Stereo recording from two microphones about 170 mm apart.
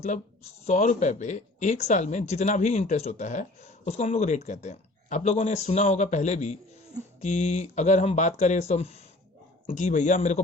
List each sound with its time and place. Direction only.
0.6 s speech: 45° left (ahead or behind)